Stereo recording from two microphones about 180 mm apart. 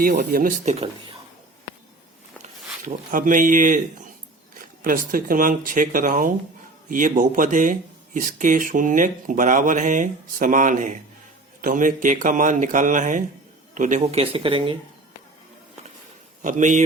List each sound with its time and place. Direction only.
0.0 s speech: 55° right (ahead or behind)
2.8 s speech: 45° right (ahead or behind); by 14.8 s 30° right (ahead or behind)
16.4 s speech: 45° right (ahead or behind)